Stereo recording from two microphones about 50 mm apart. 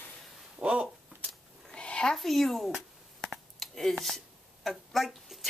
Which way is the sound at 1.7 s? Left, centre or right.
Left.